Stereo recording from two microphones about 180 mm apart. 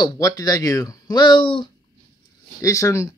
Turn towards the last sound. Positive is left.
turn(degrees=20)  # may be behind; listen again after turning